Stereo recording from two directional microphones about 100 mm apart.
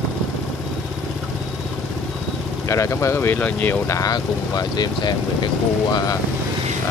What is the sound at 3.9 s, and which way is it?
Speech, 40° left (ahead or behind).